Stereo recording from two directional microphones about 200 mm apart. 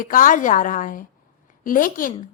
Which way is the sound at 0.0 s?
45° left (ahead or behind).